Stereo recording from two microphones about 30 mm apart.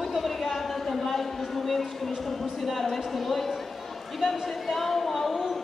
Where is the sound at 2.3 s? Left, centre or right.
Centre.